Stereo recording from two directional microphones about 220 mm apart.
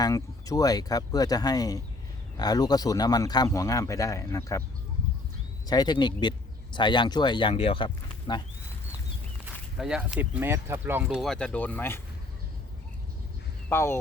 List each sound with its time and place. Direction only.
0.0 s a man's voice: 15° left (ahead or behind)
5.6 s speech: 20° left (ahead or behind)
9.7 s speech: 5° right (ahead or behind)
13.7 s a man's voice: 10° left (ahead or behind)